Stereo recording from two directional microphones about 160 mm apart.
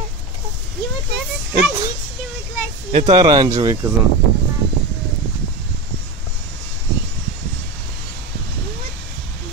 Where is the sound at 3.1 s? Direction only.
25° right (ahead or behind).